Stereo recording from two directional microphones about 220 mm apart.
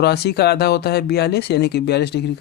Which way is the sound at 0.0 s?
50° left (ahead or behind).